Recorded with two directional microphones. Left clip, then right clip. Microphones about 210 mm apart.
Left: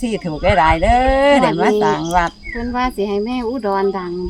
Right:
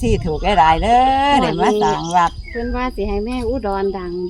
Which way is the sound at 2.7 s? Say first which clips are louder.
Left 5 dB; 55° left (ahead or behind).